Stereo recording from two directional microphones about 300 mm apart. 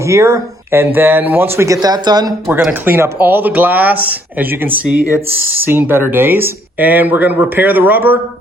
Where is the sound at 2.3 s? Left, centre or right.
Centre.